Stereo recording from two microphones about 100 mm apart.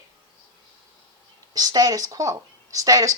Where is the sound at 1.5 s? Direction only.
40° right (ahead or behind).